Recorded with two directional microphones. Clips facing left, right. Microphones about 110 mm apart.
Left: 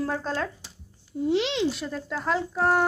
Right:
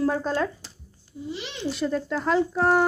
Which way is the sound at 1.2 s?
70° left (ahead or behind).